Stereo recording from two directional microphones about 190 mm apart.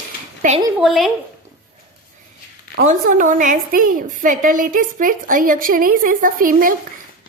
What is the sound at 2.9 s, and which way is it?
A woman's voice, 45° right (ahead or behind).